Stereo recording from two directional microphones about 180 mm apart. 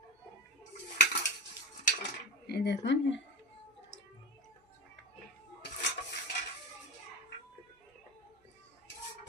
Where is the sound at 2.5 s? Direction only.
65° left (ahead or behind).